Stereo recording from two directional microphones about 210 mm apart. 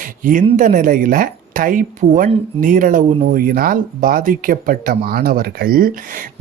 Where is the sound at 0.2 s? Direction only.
40° right (ahead or behind).